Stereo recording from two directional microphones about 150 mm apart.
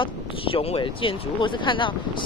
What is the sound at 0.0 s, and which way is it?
Speech, 35° left (ahead or behind).